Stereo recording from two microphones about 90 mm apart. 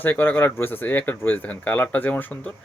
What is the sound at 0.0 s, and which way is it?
Speech, 20° left (ahead or behind).